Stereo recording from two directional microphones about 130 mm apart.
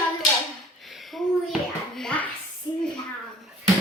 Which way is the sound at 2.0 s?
10° left (ahead or behind).